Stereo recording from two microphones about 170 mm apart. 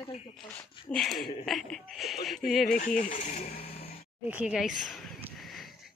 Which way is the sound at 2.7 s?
50° left (ahead or behind).